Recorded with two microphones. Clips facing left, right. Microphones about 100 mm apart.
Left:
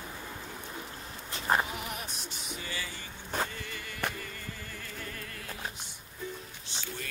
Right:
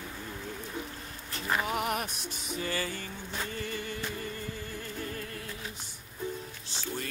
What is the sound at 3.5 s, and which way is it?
Music, 40° right (ahead or behind).